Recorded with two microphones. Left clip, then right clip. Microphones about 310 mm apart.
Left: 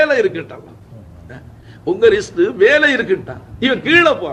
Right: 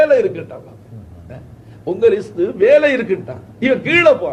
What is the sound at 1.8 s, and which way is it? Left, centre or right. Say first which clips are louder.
A man's voice: left 2 dB; left.